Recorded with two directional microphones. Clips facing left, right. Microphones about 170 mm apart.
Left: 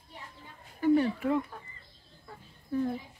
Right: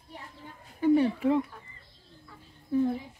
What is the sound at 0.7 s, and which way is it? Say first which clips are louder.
Speech: right 2 dB; 25° right (ahead or behind).